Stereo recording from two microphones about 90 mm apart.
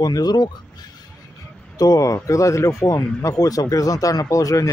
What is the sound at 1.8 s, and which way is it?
Speech, 40° left (ahead or behind).